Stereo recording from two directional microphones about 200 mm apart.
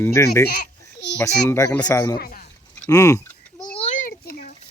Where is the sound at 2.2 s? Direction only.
45° left (ahead or behind).